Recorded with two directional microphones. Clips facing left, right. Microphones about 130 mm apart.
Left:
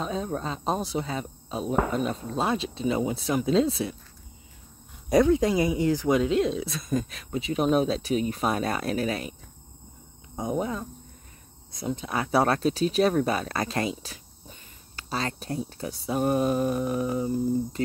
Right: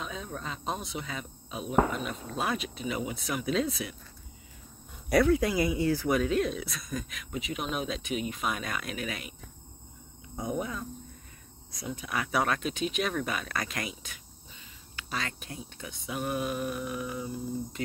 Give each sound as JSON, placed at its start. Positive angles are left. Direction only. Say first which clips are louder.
{"t": 0.0, "sound": "speech", "louder": "left 8 dB", "side_deg": 35}
{"t": 5.1, "sound": "speech", "louder": "left 4 dB", "side_deg": 20}
{"t": 10.3, "sound": "speech", "louder": "left 5 dB", "side_deg": 25}